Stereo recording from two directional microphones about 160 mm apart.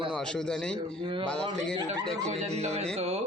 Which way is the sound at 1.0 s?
30° right (ahead or behind).